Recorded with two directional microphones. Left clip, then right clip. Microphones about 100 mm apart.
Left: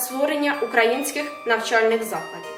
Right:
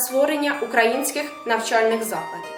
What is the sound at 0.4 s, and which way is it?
A woman's voice, 15° right (ahead or behind).